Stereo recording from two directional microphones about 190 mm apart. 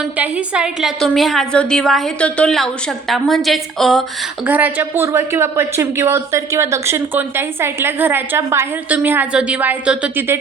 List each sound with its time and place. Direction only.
0.0 s a woman's voice: 5° right (ahead or behind)
4.4 s a woman's voice: 10° right (ahead or behind)